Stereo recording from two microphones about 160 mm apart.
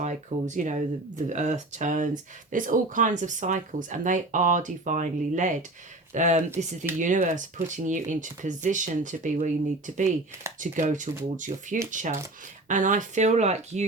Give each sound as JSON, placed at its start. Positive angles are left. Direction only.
{"t": 0.0, "sound": "speech", "side_deg": -50}